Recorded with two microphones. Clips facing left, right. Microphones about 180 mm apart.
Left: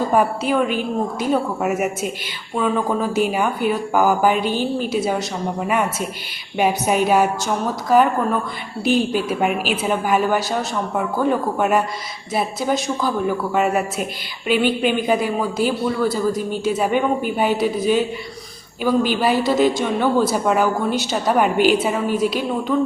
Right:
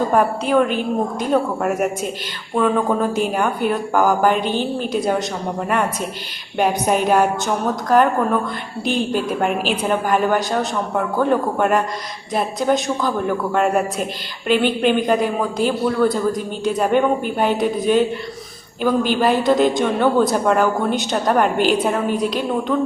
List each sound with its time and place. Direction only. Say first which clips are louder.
0.1 s speech: right 1 dB; 5° left (ahead or behind)
4.4 s a woman's voice: even; 45° left (ahead or behind)
4.9 s speech: right 1 dB; 5° left (ahead or behind)
19.2 s speech: right 3 dB; 5° left (ahead or behind)